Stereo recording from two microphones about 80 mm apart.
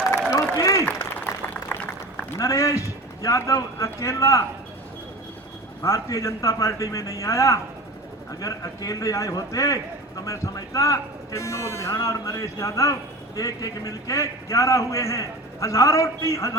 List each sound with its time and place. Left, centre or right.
0.5 s applause: left
2.4 s speech: left
5.8 s a man's voice: left